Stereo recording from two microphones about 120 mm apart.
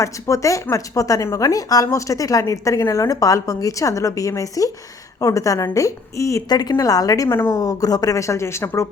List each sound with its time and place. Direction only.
0.0 s speech: 25° left (ahead or behind)